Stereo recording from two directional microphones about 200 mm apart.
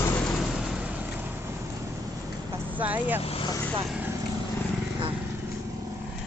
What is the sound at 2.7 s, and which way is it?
Speech, 10° right (ahead or behind).